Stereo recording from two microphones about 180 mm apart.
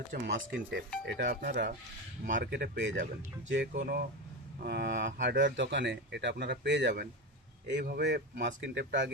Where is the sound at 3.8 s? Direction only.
55° right (ahead or behind).